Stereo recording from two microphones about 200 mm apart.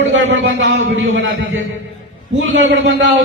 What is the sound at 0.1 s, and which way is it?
A man's voice, 70° right (ahead or behind).